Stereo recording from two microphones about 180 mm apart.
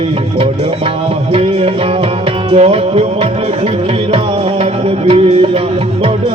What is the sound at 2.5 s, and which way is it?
Music, 35° right (ahead or behind).